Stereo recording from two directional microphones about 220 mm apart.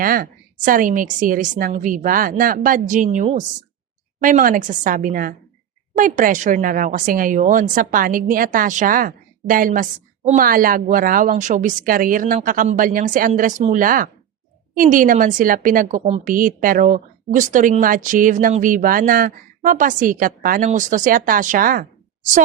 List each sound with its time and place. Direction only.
0.0 s speech: 40° right (ahead or behind)